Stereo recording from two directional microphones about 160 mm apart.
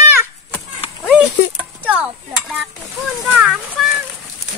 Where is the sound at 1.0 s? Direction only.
10° right (ahead or behind).